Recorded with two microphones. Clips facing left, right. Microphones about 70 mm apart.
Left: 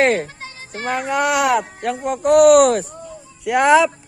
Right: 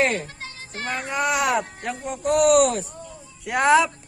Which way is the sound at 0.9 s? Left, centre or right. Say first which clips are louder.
Left 5 dB; left.